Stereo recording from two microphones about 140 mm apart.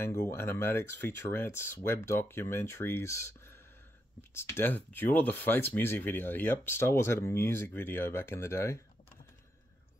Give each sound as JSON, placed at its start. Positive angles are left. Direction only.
{"t": 0.0, "sound": "speech", "side_deg": 20}